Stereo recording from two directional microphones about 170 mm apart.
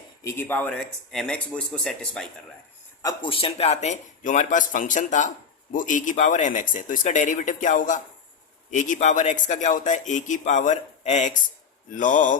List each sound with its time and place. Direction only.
0.3 s speech: 10° left (ahead or behind)
3.0 s speech: 25° left (ahead or behind); by 12.4 s 50° left (ahead or behind)